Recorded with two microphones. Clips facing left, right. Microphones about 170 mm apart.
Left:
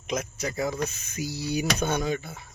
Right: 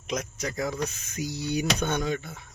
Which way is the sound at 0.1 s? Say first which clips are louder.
Left 1 dB; 5° left (ahead or behind).